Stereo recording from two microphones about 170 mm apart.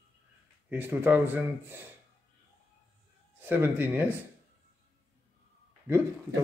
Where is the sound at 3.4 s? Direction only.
15° right (ahead or behind).